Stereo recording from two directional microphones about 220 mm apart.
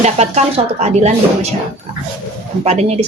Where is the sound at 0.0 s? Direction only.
30° right (ahead or behind).